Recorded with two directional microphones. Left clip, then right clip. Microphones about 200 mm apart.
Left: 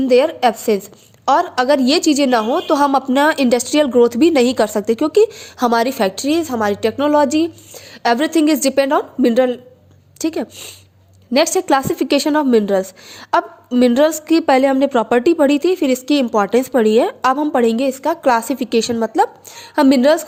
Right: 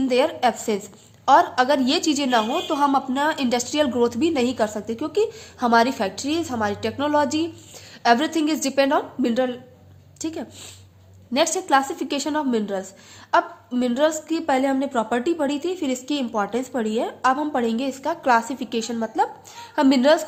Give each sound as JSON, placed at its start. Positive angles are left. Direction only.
{"t": 0.0, "sound": "a woman's voice", "side_deg": 35}